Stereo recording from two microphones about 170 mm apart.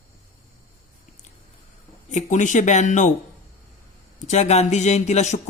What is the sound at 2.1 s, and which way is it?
Speech, 45° left (ahead or behind).